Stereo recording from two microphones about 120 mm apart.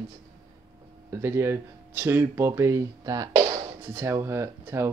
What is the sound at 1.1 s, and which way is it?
Speech, 20° right (ahead or behind).